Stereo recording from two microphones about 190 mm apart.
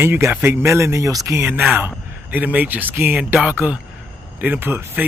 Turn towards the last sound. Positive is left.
turn(degrees=-10)  # may be behind; listen again after turning